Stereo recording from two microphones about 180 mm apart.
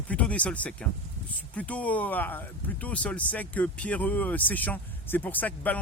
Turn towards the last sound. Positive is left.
turn(degrees=10)  # may be behind; listen again after turning